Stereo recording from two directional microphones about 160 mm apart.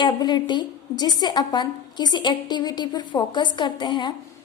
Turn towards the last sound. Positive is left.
turn(degrees=30)  # may be behind; listen again after turning